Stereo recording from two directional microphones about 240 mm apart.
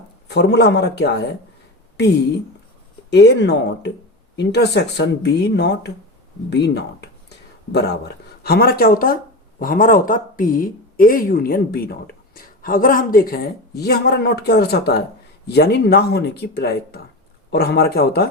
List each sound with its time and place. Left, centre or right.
0.3 s speech: left
3.1 s speech: left